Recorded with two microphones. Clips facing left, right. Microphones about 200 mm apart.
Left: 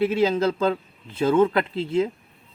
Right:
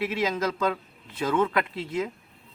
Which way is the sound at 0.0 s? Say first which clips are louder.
Left 7 dB; 30° left (ahead or behind).